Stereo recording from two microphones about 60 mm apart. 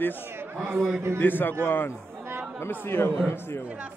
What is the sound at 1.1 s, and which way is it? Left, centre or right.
Speech, left.